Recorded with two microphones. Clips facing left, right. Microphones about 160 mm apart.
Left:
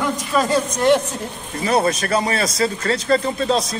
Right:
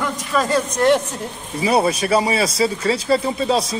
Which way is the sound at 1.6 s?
10° right (ahead or behind).